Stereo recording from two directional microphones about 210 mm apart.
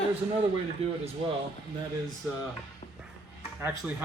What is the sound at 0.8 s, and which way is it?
Speech, 30° right (ahead or behind).